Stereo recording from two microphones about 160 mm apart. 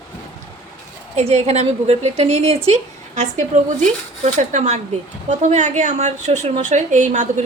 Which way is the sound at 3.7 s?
50° right (ahead or behind).